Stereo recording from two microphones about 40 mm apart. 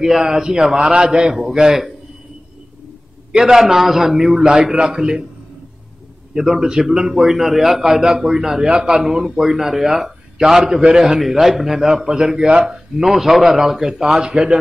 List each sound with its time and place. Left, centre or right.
0.0 s speech: centre
3.3 s a man's voice: centre
3.5 s speech: centre
6.3 s speech: centre
14.2 s a man's voice: right